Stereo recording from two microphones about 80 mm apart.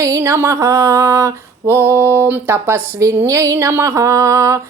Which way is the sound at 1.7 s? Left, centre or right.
Right.